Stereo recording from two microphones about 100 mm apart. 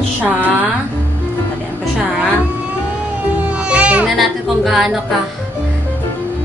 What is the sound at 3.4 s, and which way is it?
Music, 10° right (ahead or behind).